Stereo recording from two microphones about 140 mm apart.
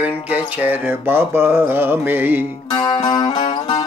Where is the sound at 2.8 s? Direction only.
30° left (ahead or behind).